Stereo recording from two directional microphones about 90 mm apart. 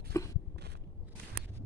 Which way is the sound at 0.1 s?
35° left (ahead or behind).